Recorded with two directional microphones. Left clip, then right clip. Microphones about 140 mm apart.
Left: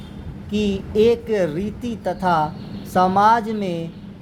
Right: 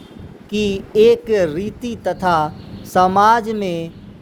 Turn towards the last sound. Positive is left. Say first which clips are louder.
# right 3 dB
turn(degrees=-45)  # may be behind; listen again after turning